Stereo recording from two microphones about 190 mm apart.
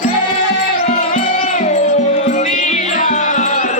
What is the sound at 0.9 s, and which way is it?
Music, 40° left (ahead or behind).